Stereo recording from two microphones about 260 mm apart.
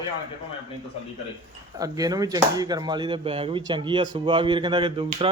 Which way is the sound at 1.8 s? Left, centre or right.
Centre.